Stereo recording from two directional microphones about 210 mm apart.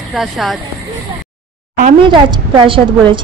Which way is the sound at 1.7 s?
40° right (ahead or behind).